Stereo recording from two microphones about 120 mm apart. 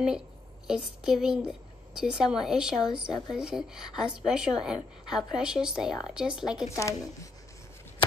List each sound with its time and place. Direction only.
0.7 s a woman's voice: 5° right (ahead or behind)
6.7 s speech: 25° left (ahead or behind)